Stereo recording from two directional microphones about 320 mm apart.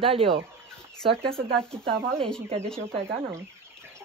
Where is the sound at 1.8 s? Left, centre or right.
Centre.